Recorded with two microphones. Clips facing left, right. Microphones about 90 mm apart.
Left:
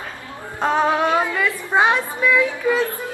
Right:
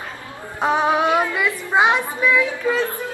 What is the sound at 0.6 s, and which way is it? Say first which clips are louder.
Music: even; 10° right (ahead or behind).